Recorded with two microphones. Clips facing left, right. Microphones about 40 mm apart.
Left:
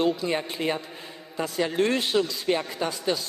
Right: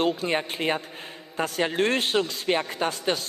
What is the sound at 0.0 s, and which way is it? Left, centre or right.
Speech, right.